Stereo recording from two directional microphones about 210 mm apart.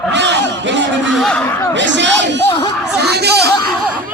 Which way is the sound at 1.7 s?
60° right (ahead or behind).